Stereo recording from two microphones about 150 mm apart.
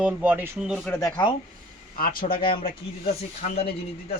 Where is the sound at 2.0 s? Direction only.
70° left (ahead or behind).